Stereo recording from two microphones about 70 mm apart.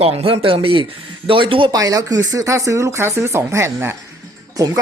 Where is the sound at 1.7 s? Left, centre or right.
Right.